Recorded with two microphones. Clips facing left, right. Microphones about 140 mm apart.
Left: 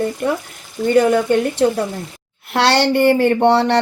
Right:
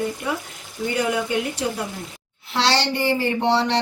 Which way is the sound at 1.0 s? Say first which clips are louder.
Left 8 dB; 50° left (ahead or behind).